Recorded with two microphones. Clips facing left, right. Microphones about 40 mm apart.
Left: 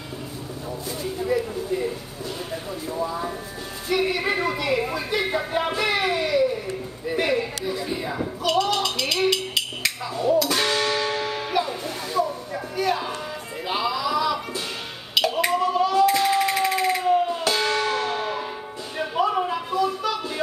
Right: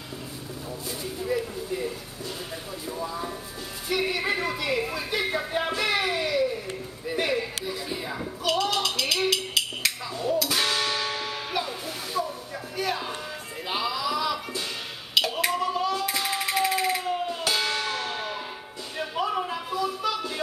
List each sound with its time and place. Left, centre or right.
1.2 s speech: centre
2.9 s speech: centre
7.1 s a sound: centre
10.1 s music: left
10.4 s music: centre
13.7 s a sound: centre